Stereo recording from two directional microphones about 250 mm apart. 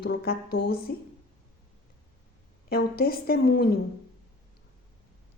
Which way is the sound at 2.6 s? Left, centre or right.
Left.